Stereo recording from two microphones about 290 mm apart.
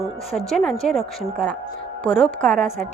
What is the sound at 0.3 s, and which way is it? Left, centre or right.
A woman's voice, centre.